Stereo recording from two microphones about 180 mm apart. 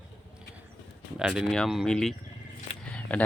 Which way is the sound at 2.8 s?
5° left (ahead or behind).